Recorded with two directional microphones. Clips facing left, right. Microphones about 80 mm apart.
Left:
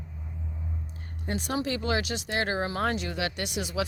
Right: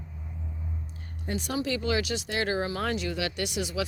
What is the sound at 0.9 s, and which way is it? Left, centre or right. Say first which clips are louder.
Speech: even; left.